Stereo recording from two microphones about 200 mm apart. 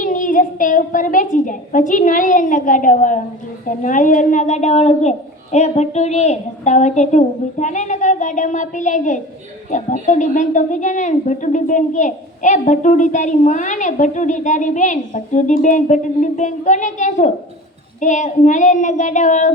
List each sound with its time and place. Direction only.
0.0 s a woman's voice: 40° left (ahead or behind)